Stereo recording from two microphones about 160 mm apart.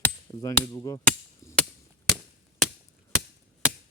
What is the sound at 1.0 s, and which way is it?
Chop, 10° left (ahead or behind).